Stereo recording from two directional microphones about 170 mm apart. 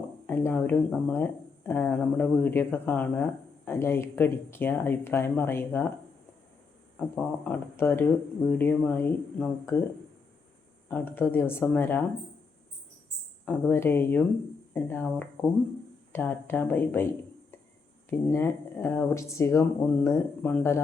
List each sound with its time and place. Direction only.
0.3 s speech: 10° left (ahead or behind)
6.9 s speech: 10° left (ahead or behind)
10.8 s speech: 10° left (ahead or behind)
13.4 s speech: 10° left (ahead or behind)
18.1 s speech: 15° left (ahead or behind)